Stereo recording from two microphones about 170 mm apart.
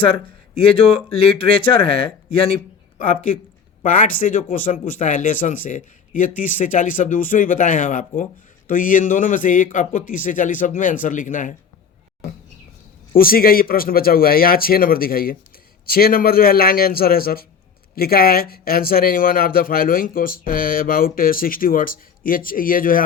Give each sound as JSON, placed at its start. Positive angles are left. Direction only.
{"t": 0.0, "sound": "speech", "side_deg": 30}
{"t": 3.9, "sound": "speech", "side_deg": 50}
{"t": 13.1, "sound": "speech", "side_deg": 60}